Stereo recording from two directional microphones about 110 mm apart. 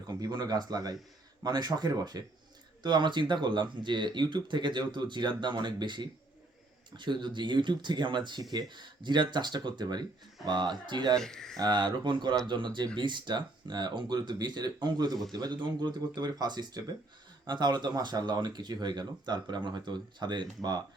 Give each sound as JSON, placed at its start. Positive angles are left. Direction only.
{"t": 0.1, "sound": "speech", "side_deg": -35}
{"t": 11.2, "sound": "speech", "side_deg": 5}
{"t": 11.5, "sound": "speech", "side_deg": -40}